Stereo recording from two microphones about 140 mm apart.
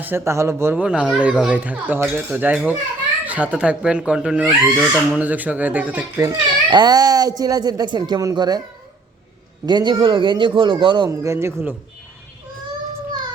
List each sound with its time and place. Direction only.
0.0 s speech: 15° right (ahead or behind)
6.1 s speech: 25° right (ahead or behind)
9.6 s speech: 30° right (ahead or behind)
11.1 s speech: 20° right (ahead or behind)